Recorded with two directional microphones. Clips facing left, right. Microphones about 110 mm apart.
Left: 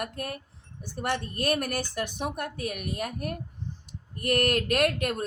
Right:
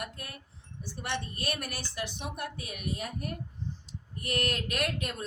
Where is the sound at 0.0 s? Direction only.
55° left (ahead or behind).